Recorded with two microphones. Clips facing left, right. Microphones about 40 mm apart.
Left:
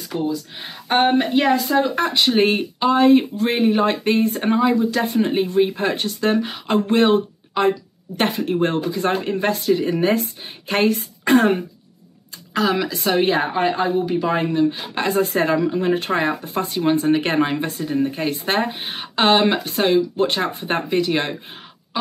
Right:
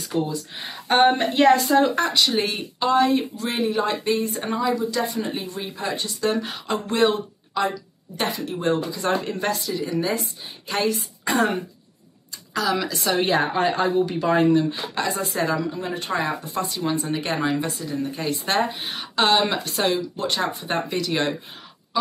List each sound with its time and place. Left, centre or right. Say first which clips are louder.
0.3 s speech: left 4 dB; centre
2.0 s speech: left 5 dB; left
2.8 s speech: left 2 dB; left
3.1 s speech: left 8 dB; left
9.6 s a woman's voice: left 7 dB; left
12.6 s speech: left 3 dB; left
13.2 s speech: left 1 dB; centre
15.0 s speech: left 6 dB; left